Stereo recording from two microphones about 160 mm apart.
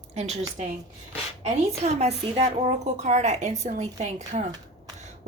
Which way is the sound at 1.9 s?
45° right (ahead or behind).